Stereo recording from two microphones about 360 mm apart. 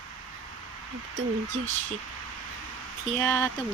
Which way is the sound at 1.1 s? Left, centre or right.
Right.